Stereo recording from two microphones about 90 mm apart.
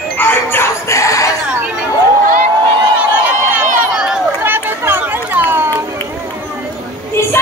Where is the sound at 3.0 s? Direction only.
15° right (ahead or behind).